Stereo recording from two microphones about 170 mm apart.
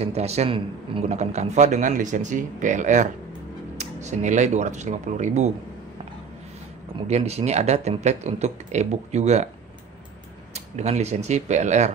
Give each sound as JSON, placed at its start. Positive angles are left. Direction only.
{"t": 0.0, "sound": "a man's voice", "side_deg": -40}
{"t": 7.1, "sound": "speech", "side_deg": -40}
{"t": 10.5, "sound": "speech", "side_deg": -40}